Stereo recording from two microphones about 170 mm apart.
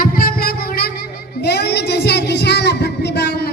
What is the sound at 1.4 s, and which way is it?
Child singing, 75° left (ahead or behind).